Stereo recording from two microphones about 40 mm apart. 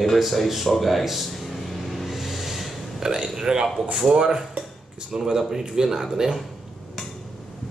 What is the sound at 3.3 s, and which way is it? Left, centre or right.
Speech, centre.